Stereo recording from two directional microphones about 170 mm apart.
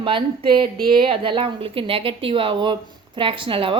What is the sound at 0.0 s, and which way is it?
A woman's voice, 30° right (ahead or behind).